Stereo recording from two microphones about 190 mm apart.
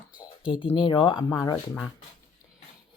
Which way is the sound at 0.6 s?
25° left (ahead or behind).